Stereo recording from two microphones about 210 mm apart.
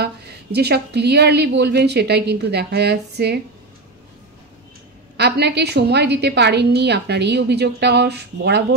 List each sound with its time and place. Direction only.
0.0 s a woman's voice: 50° right (ahead or behind)
5.1 s a woman's voice: 50° right (ahead or behind)